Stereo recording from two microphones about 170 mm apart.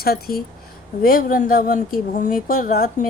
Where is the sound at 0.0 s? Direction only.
60° left (ahead or behind).